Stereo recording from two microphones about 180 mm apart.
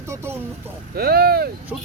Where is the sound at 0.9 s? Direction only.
60° right (ahead or behind).